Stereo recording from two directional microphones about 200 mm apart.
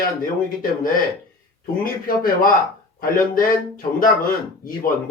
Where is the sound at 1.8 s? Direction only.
45° left (ahead or behind).